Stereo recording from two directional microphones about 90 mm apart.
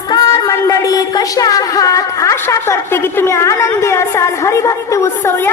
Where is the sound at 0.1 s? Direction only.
40° left (ahead or behind).